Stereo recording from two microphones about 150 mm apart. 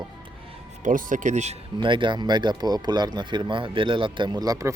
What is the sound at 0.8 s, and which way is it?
Speech, 60° right (ahead or behind).